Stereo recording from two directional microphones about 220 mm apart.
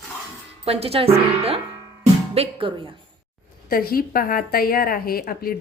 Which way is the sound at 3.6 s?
40° left (ahead or behind).